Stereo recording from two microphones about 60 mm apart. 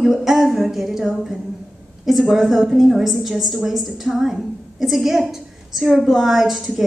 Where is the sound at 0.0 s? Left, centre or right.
Centre.